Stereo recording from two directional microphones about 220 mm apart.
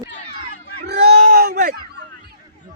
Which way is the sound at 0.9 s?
45° right (ahead or behind).